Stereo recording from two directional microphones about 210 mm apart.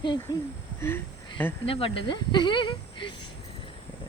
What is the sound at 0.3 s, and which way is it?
Speech, 20° left (ahead or behind).